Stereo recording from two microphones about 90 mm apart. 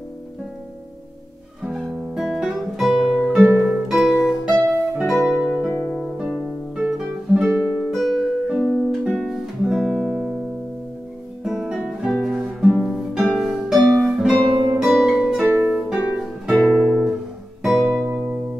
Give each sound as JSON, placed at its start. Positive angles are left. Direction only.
{"t": 1.6, "sound": "guitar", "side_deg": -10}
{"t": 4.6, "sound": "music", "side_deg": -10}
{"t": 5.7, "sound": "harp", "side_deg": 10}
{"t": 6.1, "sound": "music", "side_deg": -10}
{"t": 11.4, "sound": "music", "side_deg": -5}
{"t": 16.6, "sound": "guitar", "side_deg": 5}
{"t": 17.6, "sound": "music", "side_deg": 0}
{"t": 18.1, "sound": "music", "side_deg": -25}